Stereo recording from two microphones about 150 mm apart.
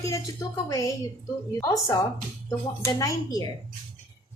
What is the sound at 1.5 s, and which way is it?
A woman's voice, 20° left (ahead or behind).